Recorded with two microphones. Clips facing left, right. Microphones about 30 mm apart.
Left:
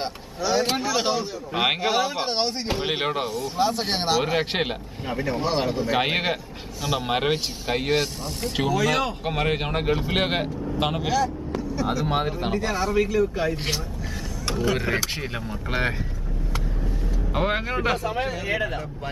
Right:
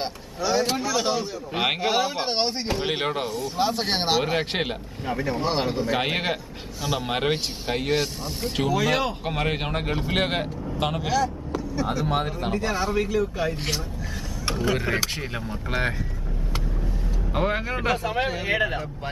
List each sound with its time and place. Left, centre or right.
0.0 s speech: centre
0.6 s speech: centre
2.6 s speech: centre
4.3 s speech: centre
5.8 s speech: centre
12.5 s speech: centre
14.5 s speech: centre
14.8 s speech: centre
17.3 s speech: centre
18.3 s speech: centre